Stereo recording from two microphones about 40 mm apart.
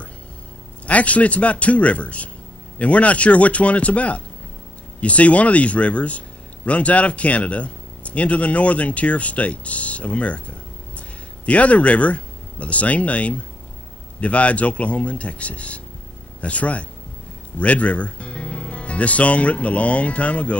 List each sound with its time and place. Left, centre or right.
0.8 s a man's voice: left